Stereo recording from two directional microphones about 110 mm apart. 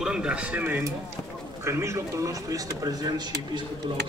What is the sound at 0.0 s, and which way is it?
A man's voice, 5° right (ahead or behind).